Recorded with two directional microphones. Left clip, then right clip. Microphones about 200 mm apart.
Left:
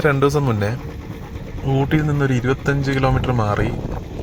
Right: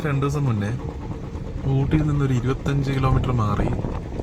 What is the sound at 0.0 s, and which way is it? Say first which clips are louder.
Speech: left 9 dB; 35° left (ahead or behind).